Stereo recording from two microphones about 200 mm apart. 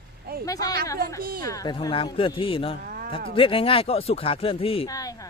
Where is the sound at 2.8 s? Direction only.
45° right (ahead or behind).